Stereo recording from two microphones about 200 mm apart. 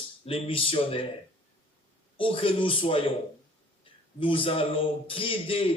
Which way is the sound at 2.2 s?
25° left (ahead or behind).